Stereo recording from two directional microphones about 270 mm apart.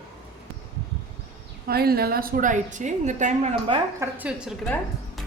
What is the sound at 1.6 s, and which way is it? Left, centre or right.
A woman's voice, right.